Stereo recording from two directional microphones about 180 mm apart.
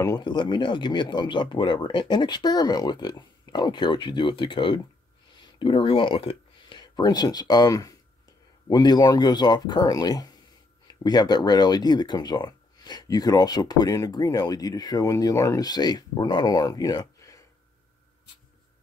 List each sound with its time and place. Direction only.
0.0 s speech: 20° left (ahead or behind)